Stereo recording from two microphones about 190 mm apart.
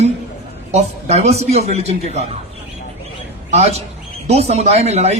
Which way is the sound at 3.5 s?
35° right (ahead or behind).